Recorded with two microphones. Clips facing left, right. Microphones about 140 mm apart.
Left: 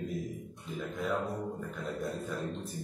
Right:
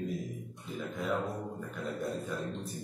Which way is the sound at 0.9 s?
Centre (ahead or behind).